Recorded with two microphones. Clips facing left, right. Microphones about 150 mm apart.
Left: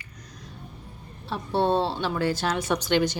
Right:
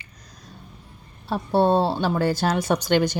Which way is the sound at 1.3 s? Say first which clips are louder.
Right 4 dB; 40° right (ahead or behind).